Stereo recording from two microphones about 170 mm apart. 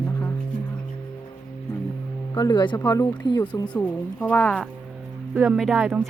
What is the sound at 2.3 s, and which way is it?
Speech, 25° left (ahead or behind).